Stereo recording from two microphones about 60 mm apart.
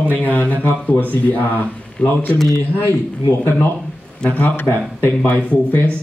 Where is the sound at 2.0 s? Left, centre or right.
Centre.